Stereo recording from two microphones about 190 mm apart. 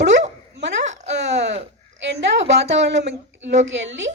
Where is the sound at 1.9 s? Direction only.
65° right (ahead or behind).